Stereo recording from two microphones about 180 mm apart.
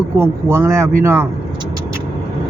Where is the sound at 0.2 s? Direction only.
15° right (ahead or behind).